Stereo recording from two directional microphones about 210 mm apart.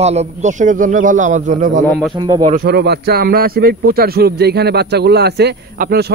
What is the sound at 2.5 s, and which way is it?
A man's voice, 50° right (ahead or behind).